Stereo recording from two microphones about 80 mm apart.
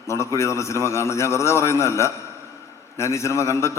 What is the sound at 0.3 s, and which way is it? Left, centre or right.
A man's voice, left.